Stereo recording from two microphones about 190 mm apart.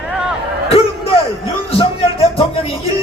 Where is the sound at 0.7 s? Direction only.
30° left (ahead or behind).